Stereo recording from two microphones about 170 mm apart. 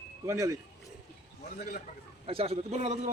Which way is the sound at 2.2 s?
35° right (ahead or behind).